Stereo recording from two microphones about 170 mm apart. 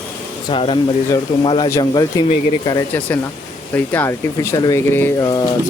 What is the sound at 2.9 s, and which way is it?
Speech, 10° left (ahead or behind).